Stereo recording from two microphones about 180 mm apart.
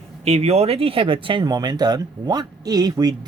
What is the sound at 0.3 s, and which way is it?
Speech, 35° right (ahead or behind).